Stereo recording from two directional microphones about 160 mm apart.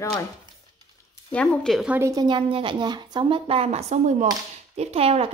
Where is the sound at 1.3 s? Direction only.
5° left (ahead or behind).